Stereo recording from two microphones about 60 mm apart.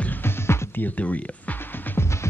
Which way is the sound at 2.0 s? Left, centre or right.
Left.